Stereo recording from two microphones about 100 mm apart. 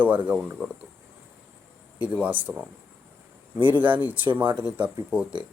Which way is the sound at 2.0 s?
15° right (ahead or behind).